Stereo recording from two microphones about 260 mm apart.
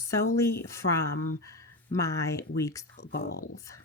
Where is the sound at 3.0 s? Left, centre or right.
Left.